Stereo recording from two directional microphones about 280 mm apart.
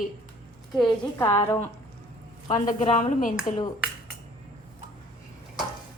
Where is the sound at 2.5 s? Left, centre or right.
Left.